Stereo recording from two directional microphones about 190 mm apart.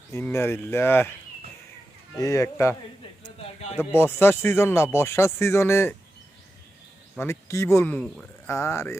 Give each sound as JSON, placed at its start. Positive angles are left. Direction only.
{"t": 0.1, "sound": "speech", "side_deg": 15}
{"t": 2.1, "sound": "speech", "side_deg": 15}
{"t": 3.2, "sound": "a sound", "side_deg": 30}
{"t": 3.8, "sound": "speech", "side_deg": 10}
{"t": 7.2, "sound": "speech", "side_deg": 15}
{"t": 7.9, "sound": "speech", "side_deg": 0}
{"t": 8.4, "sound": "speech", "side_deg": 15}